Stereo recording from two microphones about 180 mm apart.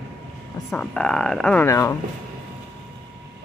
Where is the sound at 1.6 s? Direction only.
15° left (ahead or behind).